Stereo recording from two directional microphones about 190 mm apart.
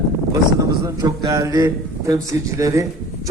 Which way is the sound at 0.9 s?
20° right (ahead or behind).